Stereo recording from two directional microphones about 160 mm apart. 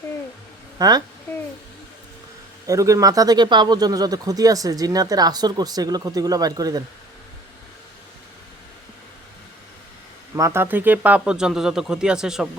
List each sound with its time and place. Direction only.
0.8 s speech: 25° right (ahead or behind)
2.6 s speech: 20° right (ahead or behind)
10.3 s speech: 15° right (ahead or behind)